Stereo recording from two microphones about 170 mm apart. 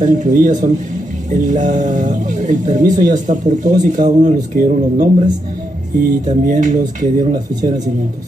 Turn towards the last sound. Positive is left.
turn(degrees=-45)  # may be behind; listen again after turning